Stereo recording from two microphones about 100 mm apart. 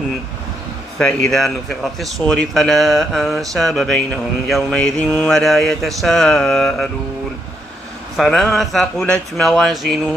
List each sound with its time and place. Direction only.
0.9 s speech: 10° left (ahead or behind)
4.6 s mantra: 10° left (ahead or behind)
5.3 s speech: centre (ahead or behind)
8.2 s speech: 5° left (ahead or behind)